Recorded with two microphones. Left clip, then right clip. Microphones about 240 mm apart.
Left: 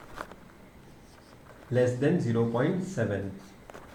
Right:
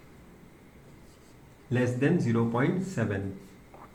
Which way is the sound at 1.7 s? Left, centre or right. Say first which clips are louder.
Left 2 dB; right.